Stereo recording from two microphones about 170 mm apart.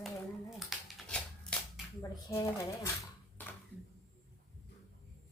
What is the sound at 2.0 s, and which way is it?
Speech, 20° left (ahead or behind).